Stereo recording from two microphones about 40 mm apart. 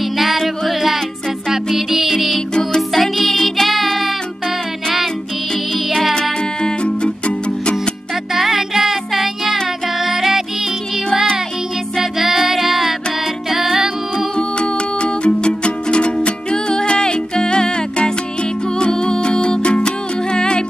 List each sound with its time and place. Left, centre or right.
0.2 s music: centre
2.1 s music: centre
6.6 s music: left
8.4 s music: centre
12.0 s music: centre
14.1 s music: left